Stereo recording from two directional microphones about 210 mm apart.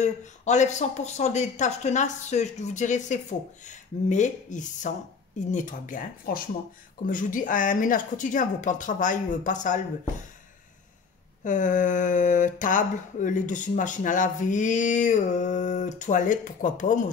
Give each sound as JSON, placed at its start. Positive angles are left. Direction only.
{"t": 0.0, "sound": "speech", "side_deg": 35}
{"t": 11.4, "sound": "speech", "side_deg": 35}